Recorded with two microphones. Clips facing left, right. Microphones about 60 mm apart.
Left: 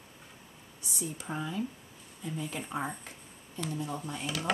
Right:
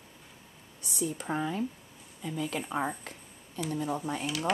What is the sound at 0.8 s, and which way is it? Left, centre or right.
Speech, right.